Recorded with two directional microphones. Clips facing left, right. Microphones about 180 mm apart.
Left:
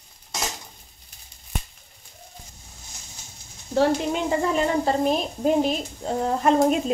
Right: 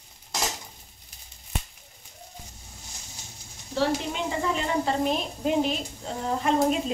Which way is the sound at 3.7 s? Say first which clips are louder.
Left 5 dB; 45° left (ahead or behind).